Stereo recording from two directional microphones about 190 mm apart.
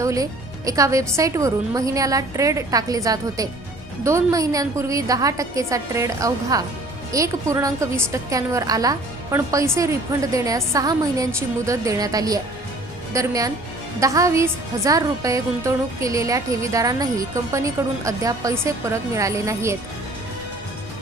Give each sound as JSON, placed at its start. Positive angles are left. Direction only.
{"t": 0.0, "sound": "a woman's voice", "side_deg": -15}